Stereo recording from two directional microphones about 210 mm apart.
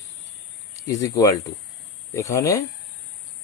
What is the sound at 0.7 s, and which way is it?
Speech, 15° left (ahead or behind).